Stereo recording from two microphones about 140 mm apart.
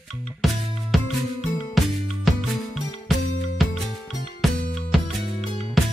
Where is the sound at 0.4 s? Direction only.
Centre (ahead or behind).